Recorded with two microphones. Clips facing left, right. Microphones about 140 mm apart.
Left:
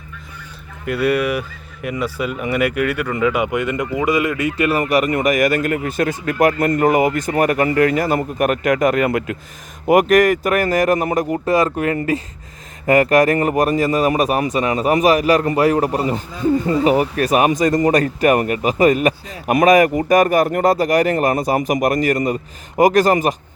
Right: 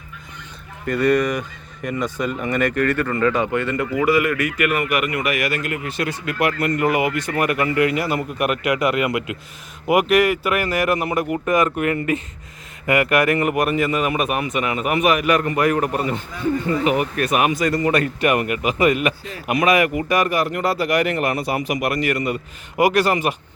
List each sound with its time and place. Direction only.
0.9 s speech: 5° left (ahead or behind); by 23.3 s 40° left (ahead or behind)